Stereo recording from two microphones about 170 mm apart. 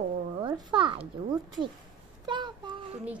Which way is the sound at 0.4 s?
25° right (ahead or behind).